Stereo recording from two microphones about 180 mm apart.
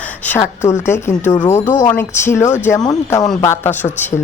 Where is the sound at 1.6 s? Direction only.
45° left (ahead or behind).